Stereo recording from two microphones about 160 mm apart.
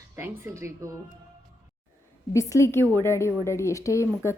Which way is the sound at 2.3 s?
20° left (ahead or behind).